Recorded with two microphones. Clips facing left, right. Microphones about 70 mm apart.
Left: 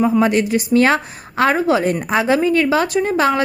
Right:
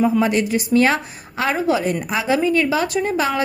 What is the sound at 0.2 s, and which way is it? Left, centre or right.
A woman's voice, left.